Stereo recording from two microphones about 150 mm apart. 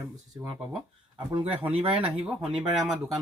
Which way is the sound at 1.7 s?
40° right (ahead or behind).